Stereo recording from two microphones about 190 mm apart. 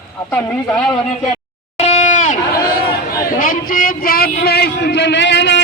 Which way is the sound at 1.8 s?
35° left (ahead or behind).